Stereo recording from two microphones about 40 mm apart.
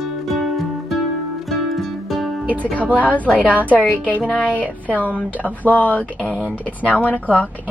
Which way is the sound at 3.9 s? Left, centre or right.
Left.